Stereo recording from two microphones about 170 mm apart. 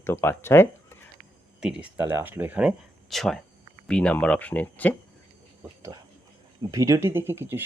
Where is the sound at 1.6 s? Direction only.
5° right (ahead or behind); by 4.9 s 10° left (ahead or behind).